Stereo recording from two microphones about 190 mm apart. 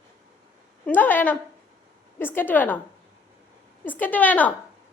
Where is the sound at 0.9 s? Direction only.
10° left (ahead or behind).